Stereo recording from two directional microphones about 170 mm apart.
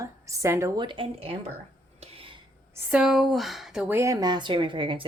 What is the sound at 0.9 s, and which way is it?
Speech, 30° right (ahead or behind).